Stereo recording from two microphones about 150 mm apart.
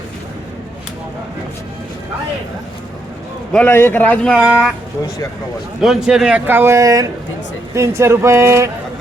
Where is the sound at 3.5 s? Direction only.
15° left (ahead or behind).